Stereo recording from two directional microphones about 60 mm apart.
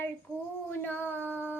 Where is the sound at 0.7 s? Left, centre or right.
Left.